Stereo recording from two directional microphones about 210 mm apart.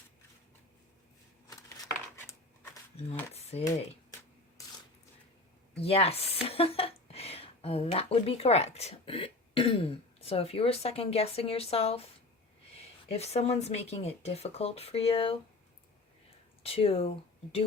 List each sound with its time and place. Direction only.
1.5 s a sound: 15° left (ahead or behind)
3.5 s speech: 30° left (ahead or behind)
5.8 s speech: 30° left (ahead or behind)
13.1 s speech: 30° left (ahead or behind)
16.6 s speech: 30° left (ahead or behind)